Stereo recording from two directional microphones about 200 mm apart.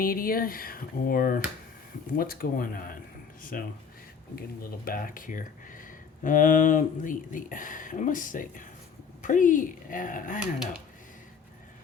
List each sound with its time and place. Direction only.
0.0 s speech: 45° left (ahead or behind)
4.9 s speech: 45° left (ahead or behind)